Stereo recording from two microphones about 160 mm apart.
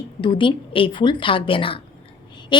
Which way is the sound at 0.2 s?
30° left (ahead or behind).